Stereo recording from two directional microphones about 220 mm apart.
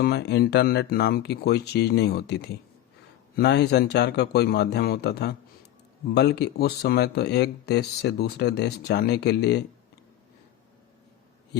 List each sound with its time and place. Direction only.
0.0 s speech: 50° left (ahead or behind)